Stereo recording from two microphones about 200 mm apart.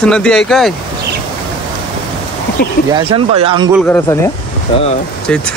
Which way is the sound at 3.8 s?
10° left (ahead or behind).